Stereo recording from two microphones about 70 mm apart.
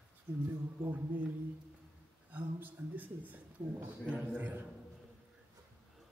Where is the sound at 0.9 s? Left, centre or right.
Right.